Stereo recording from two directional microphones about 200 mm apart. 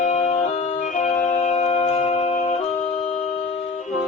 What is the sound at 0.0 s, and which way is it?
Music, 35° left (ahead or behind).